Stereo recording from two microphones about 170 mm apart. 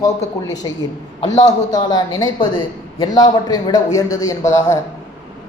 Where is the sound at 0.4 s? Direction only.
20° left (ahead or behind).